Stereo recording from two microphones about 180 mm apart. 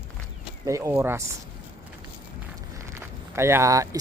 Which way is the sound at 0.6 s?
15° right (ahead or behind).